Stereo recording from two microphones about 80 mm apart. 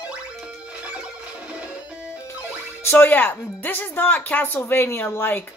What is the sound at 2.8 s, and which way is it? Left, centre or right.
Speech, left.